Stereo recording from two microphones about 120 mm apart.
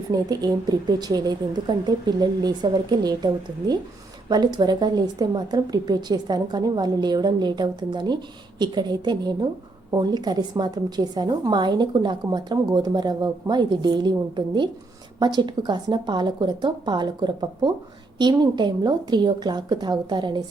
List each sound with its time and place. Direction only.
0.1 s a woman's voice: 35° right (ahead or behind)